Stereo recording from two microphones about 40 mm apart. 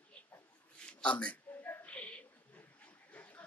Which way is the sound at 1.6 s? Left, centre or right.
Left.